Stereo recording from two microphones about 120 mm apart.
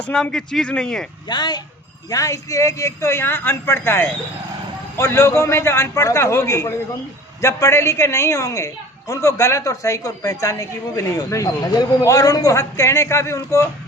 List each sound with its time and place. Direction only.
0.0 s speech: 5° left (ahead or behind)
1.3 s a woman's voice: 35° left (ahead or behind)